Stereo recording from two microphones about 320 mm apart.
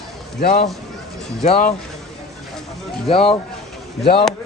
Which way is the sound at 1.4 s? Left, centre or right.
Centre.